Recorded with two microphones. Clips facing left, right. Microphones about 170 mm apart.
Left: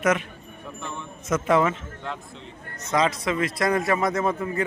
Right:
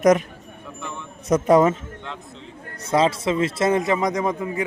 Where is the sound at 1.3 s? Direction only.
35° right (ahead or behind).